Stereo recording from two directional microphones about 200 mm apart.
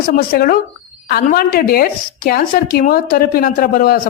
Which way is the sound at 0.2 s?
45° left (ahead or behind).